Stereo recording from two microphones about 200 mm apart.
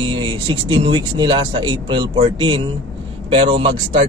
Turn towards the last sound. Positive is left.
turn(degrees=-25)  # may be behind; listen again after turning